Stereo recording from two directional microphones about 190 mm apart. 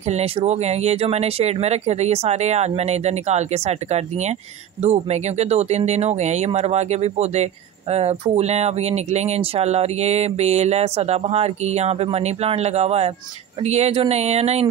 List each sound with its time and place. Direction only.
0.0 s speech: 35° right (ahead or behind)